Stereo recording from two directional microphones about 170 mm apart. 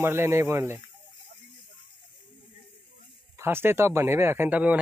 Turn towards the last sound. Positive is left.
turn(degrees=-10)  # may be behind; listen again after turning